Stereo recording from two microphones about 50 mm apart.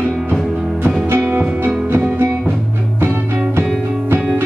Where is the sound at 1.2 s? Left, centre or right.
Right.